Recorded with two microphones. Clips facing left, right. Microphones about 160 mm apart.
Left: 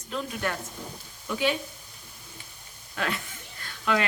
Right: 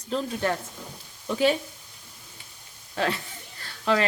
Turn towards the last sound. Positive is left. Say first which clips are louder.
# right 3 dB
turn(degrees=-35)  # may be behind; listen again after turning